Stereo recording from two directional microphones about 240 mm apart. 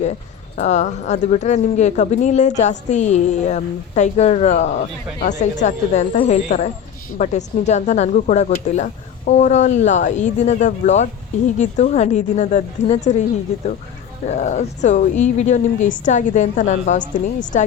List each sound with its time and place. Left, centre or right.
0.5 s a woman's voice: left
14.3 s speech: left